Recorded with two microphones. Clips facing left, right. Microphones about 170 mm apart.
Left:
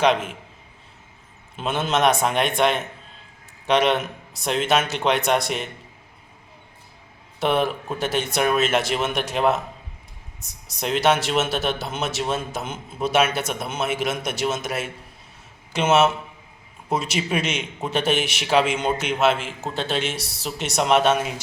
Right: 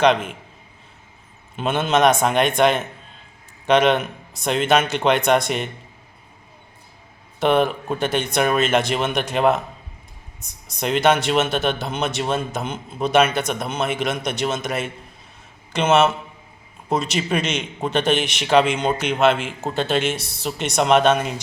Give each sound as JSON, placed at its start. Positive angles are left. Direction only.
{"t": 0.0, "sound": "speech", "side_deg": 5}
{"t": 1.5, "sound": "speech", "side_deg": 0}
{"t": 7.3, "sound": "speech", "side_deg": 0}
{"t": 10.7, "sound": "a man's voice", "side_deg": 0}